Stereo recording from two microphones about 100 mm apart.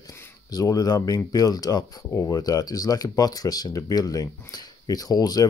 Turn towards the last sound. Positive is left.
turn(degrees=40)  # may be behind; listen again after turning